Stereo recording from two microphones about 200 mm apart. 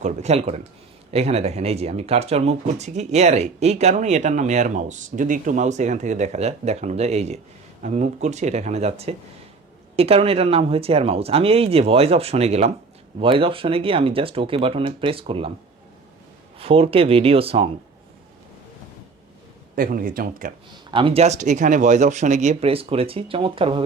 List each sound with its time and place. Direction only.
0.0 s speech: 35° right (ahead or behind)
16.6 s speech: 30° right (ahead or behind)
19.7 s speech: 45° right (ahead or behind)
20.9 s speech: 25° right (ahead or behind)